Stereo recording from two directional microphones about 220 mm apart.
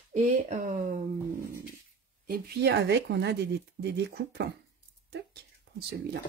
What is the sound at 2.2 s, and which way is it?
Speech, 45° right (ahead or behind).